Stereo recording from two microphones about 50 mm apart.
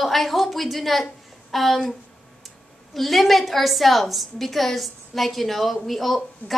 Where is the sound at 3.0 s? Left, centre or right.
Centre.